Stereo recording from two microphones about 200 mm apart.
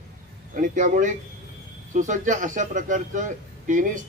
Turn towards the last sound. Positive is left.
turn(degrees=-40)  # may be behind; listen again after turning